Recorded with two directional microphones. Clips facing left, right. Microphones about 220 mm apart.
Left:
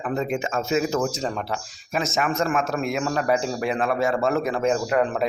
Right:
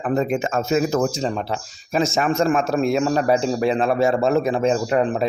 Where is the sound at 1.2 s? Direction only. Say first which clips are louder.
Right 3 dB; 25° right (ahead or behind).